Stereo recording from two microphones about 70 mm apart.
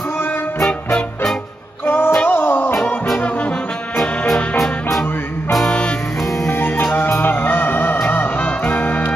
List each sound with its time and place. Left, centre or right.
1.9 s music: left
3.2 s brass instrument: left
5.7 s music: centre
6.4 s music: left